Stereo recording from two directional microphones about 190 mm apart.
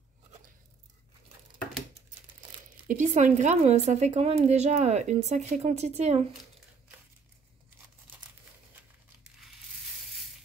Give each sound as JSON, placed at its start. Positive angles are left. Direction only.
{"t": 2.9, "sound": "a woman's voice", "side_deg": -40}